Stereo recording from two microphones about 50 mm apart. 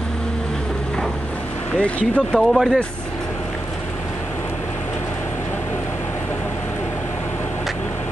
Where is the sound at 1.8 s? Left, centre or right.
Centre.